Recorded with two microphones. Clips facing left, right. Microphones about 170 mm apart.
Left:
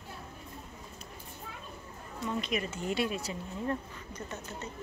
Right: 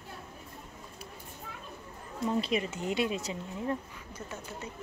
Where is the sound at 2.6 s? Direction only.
20° right (ahead or behind).